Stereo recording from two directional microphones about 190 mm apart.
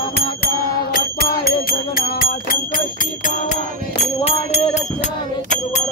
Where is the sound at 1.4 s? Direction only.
50° left (ahead or behind).